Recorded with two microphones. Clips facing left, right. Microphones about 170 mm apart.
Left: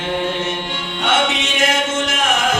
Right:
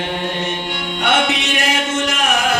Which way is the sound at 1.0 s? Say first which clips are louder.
Right 1 dB; 15° right (ahead or behind).